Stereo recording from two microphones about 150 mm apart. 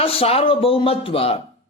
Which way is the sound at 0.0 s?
40° left (ahead or behind).